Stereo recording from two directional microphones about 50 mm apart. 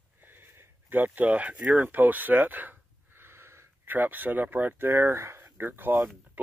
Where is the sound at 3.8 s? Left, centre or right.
Right.